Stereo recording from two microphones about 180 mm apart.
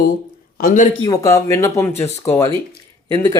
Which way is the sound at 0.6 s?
45° left (ahead or behind).